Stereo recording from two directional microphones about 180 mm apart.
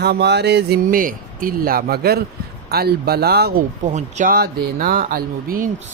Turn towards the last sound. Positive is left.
turn(degrees=-55)  # may be behind; listen again after turning